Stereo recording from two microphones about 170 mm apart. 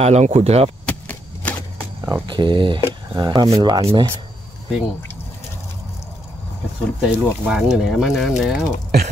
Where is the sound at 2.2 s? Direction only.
30° right (ahead or behind).